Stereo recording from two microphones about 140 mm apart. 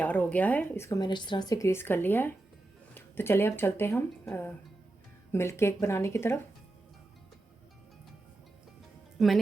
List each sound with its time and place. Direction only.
0.0 s speech: 10° left (ahead or behind)
9.1 s speech: centre (ahead or behind)